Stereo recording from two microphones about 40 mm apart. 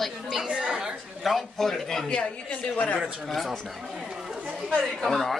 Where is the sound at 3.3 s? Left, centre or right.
Centre.